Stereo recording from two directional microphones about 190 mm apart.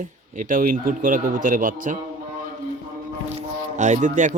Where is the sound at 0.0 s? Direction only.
45° right (ahead or behind).